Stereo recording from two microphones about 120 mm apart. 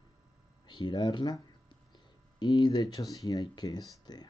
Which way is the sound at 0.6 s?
40° left (ahead or behind).